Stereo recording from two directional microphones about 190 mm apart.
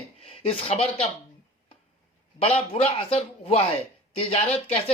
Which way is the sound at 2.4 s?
30° left (ahead or behind).